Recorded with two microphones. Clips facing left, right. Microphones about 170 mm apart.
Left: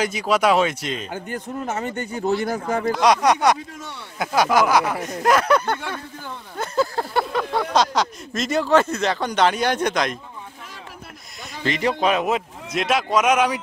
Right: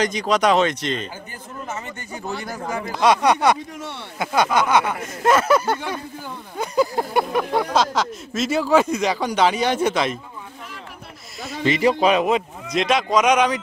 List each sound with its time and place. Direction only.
0.0 s speech: 5° left (ahead or behind)
1.1 s a man's voice: 65° left (ahead or behind)
2.9 s speech: centre (ahead or behind)
6.5 s a sound: 15° right (ahead or behind)
7.7 s speech: centre (ahead or behind)
11.6 s speech: 5° right (ahead or behind)